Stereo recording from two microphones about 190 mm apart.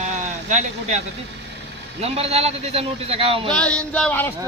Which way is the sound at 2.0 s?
35° right (ahead or behind).